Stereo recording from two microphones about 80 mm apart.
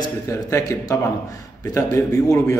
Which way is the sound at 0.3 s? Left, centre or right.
Left.